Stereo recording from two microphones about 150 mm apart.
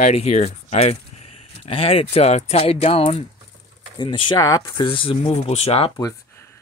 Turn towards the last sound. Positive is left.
turn(degrees=40)  # may be behind; listen again after turning